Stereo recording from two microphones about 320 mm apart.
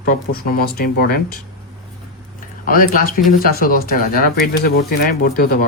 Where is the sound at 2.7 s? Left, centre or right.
Left.